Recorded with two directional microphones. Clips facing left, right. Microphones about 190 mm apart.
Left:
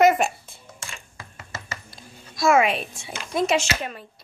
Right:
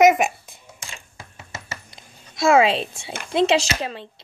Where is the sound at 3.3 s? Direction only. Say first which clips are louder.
Right 3 dB; 30° right (ahead or behind).